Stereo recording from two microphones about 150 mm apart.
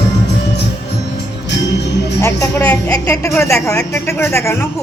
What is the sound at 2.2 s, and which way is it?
Speech, 15° left (ahead or behind).